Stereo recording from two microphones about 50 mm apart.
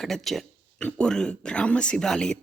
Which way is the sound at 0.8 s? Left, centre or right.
Centre.